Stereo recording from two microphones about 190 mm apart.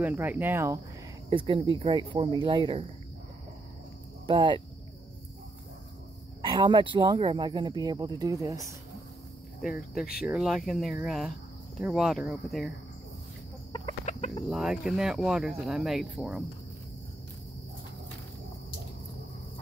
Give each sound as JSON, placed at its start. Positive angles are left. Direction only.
{"t": 0.0, "sound": "speech", "side_deg": -10}
{"t": 1.3, "sound": "speech", "side_deg": -25}
{"t": 4.3, "sound": "speech", "side_deg": -25}
{"t": 6.4, "sound": "speech", "side_deg": -25}
{"t": 9.6, "sound": "speech", "side_deg": 0}
{"t": 14.0, "sound": "chicken", "side_deg": 35}
{"t": 14.4, "sound": "speech", "side_deg": 0}